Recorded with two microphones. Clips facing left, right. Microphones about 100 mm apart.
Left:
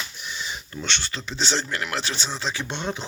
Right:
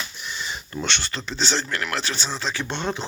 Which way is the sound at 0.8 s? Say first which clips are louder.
Right 3 dB; centre (ahead or behind).